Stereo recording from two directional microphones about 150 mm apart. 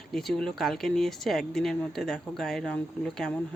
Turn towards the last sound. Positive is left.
turn(degrees=5)  # may be behind; listen again after turning